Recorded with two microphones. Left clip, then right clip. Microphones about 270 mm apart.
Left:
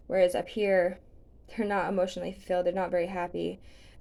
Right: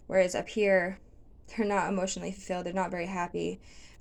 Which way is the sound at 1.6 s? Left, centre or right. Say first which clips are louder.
Left 1 dB; right.